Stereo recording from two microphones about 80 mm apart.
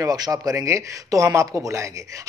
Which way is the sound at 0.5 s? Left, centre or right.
Right.